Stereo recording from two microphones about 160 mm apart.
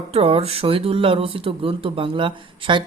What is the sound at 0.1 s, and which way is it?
Speech, 35° right (ahead or behind).